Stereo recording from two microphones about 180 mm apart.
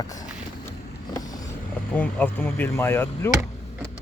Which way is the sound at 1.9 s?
10° left (ahead or behind).